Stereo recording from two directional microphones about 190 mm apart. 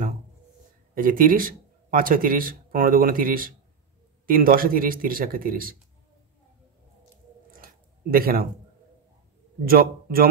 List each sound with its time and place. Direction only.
0.9 s speech: 45° right (ahead or behind)
7.5 s a sound: 50° right (ahead or behind)
9.7 s speech: 50° right (ahead or behind)